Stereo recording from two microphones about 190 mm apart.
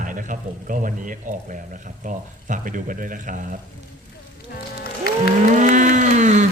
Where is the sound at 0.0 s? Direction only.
45° right (ahead or behind).